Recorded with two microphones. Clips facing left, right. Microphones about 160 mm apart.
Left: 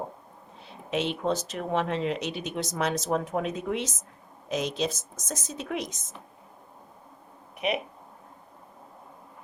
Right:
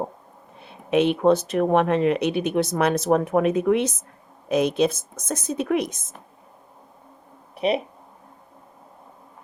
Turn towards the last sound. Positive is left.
turn(degrees=-35)  # may be behind; listen again after turning